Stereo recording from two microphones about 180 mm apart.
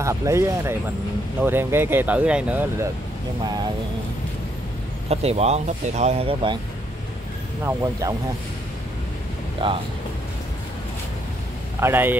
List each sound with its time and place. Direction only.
0.0 s speech: 15° right (ahead or behind)
5.1 s speech: 35° right (ahead or behind)
7.6 s speech: 15° right (ahead or behind)
9.6 s speech: 30° right (ahead or behind)
11.8 s speech: 10° right (ahead or behind)